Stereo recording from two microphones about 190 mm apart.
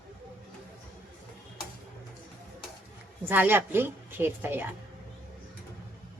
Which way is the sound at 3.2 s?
10° right (ahead or behind).